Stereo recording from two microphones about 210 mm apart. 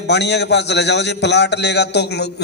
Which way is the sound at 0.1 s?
55° left (ahead or behind).